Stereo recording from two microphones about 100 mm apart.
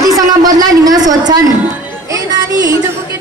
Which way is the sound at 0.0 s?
40° right (ahead or behind).